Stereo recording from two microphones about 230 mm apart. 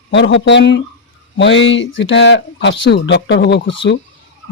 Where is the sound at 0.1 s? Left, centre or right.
Left.